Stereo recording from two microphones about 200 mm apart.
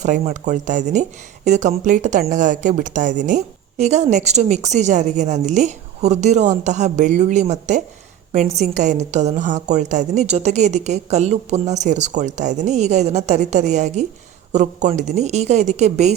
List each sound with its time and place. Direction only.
0.0 s speech: 35° right (ahead or behind)